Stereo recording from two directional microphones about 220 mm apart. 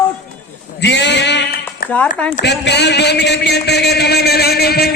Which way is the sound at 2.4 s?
50° left (ahead or behind).